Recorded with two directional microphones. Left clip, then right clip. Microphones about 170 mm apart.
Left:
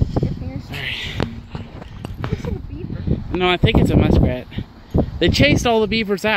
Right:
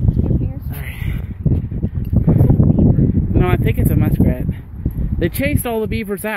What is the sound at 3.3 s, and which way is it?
Speech, centre (ahead or behind).